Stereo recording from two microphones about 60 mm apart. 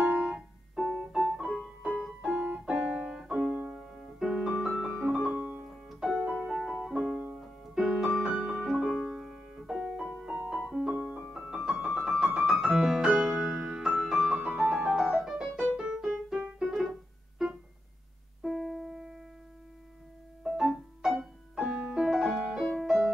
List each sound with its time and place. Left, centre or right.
0.0 s music: centre
2.2 s keyboard: right
3.7 s piano: centre
6.7 s music: centre
8.0 s piano: centre
10.0 s music: centre
10.7 s piano: centre
11.3 s piano: centre
11.8 s keyboard: centre
12.4 s music: centre
18.4 s music: centre
20.4 s music: centre